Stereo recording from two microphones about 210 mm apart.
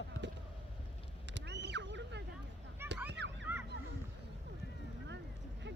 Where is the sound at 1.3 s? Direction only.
55° right (ahead or behind).